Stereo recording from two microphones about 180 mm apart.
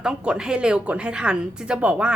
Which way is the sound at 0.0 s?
5° right (ahead or behind).